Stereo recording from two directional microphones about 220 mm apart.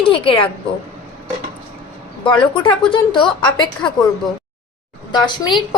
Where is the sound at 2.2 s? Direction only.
20° left (ahead or behind).